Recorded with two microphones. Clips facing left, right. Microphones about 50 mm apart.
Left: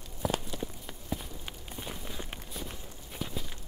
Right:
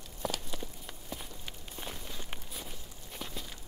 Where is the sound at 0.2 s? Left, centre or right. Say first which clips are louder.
Left 4 dB; centre.